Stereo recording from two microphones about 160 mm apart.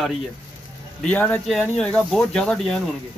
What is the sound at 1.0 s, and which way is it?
Speech, 10° left (ahead or behind).